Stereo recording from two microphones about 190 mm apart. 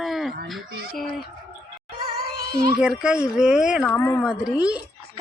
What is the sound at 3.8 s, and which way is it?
Speech, 10° left (ahead or behind).